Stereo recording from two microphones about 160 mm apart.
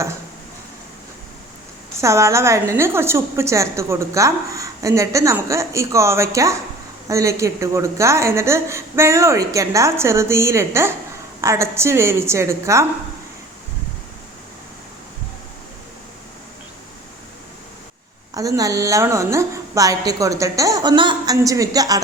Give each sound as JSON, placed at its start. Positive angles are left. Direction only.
{"t": 2.0, "sound": "a woman's voice", "side_deg": -20}
{"t": 18.3, "sound": "a woman's voice", "side_deg": -20}